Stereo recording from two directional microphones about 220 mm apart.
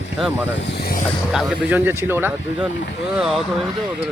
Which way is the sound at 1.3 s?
5° right (ahead or behind).